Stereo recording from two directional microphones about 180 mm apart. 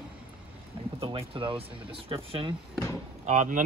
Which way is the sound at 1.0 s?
30° right (ahead or behind).